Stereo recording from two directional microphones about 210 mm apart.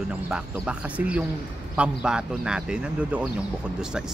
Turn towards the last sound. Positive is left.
turn(degrees=-5)  # may be behind; listen again after turning